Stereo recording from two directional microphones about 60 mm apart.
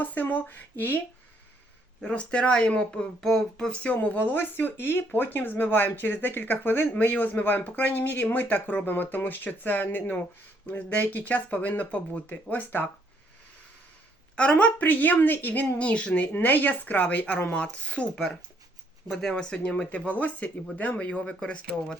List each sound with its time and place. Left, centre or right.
0.0 s speech: left
2.0 s speech: left
3.9 s speech: left
14.3 s speech: centre
16.3 s speech: left; by 19.3 s centre
19.3 s speech: centre